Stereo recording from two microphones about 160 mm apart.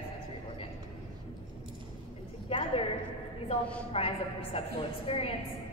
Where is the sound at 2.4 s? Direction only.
35° left (ahead or behind).